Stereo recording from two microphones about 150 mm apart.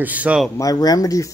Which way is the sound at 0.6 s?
25° left (ahead or behind).